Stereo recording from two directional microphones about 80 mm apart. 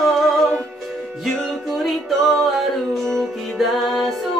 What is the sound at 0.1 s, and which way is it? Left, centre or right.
Music, centre.